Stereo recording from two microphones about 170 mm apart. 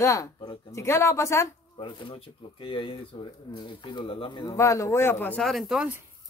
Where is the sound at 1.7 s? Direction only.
30° left (ahead or behind).